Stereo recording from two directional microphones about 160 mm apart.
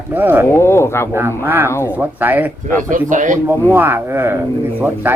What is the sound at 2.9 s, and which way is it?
Speech, 50° right (ahead or behind).